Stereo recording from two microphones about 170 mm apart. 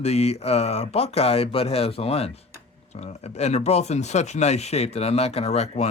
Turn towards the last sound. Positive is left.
turn(degrees=40)  # may be behind; listen again after turning